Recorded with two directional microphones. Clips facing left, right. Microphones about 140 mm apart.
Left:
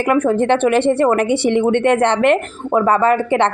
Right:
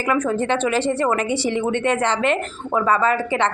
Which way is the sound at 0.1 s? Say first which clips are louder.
Left 5 dB; 60° left (ahead or behind).